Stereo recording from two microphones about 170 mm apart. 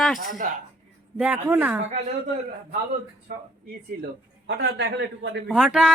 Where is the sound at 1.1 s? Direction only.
10° right (ahead or behind).